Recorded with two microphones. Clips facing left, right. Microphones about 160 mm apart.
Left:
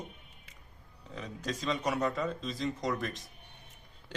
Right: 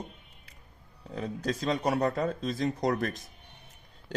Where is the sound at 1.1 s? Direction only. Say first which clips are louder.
Right 6 dB; 45° right (ahead or behind).